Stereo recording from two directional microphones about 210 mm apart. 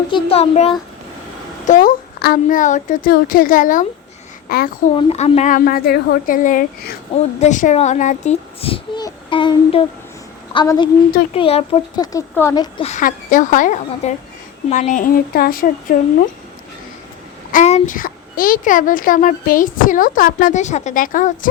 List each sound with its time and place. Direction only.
0.1 s speech: 30° left (ahead or behind)
1.6 s a woman's voice: 40° left (ahead or behind)
4.9 s a woman's voice: 30° left (ahead or behind)
12.1 s speech: 15° left (ahead or behind)
12.8 s a woman's voice: 35° left (ahead or behind)
17.5 s a woman's voice: 35° left (ahead or behind)